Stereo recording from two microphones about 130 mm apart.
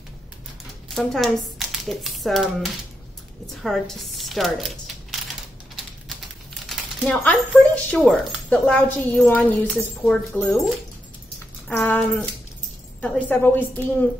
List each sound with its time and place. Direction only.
0.9 s speech: centre (ahead or behind)
7.1 s speech: 10° left (ahead or behind)
11.7 s speech: 15° left (ahead or behind)
13.0 s speech: 15° left (ahead or behind)